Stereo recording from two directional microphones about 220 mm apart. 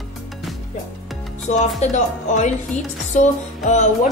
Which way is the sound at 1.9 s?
35° left (ahead or behind).